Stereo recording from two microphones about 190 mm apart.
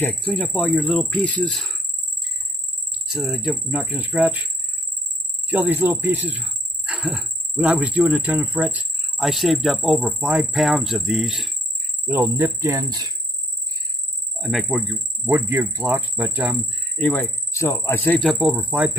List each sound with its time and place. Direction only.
0.2 s speech: 5° left (ahead or behind)
5.5 s speech: 10° right (ahead or behind)
14.4 s speech: centre (ahead or behind)